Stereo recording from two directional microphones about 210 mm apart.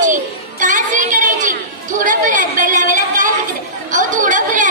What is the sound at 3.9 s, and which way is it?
Chatter, 35° right (ahead or behind).